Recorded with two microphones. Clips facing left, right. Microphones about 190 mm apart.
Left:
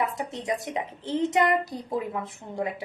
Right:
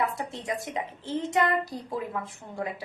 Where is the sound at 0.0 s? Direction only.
20° left (ahead or behind).